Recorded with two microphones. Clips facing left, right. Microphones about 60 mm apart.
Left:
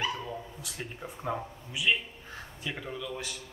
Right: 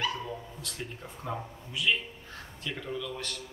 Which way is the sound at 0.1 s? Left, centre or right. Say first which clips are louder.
Even; centre.